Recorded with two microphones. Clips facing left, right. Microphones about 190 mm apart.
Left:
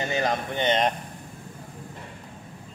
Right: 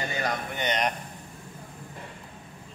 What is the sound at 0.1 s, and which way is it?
Speech, 25° left (ahead or behind).